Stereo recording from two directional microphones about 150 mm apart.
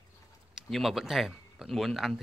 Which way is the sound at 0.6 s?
Centre (ahead or behind).